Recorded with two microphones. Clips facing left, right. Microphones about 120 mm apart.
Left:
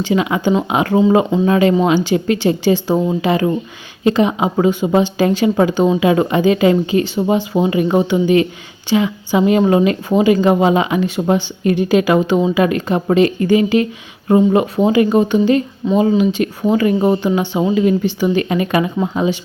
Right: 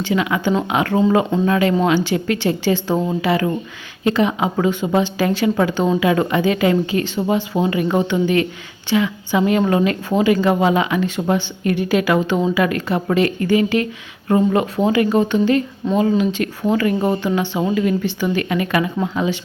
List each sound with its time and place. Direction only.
0.1 s a woman's voice: 25° left (ahead or behind)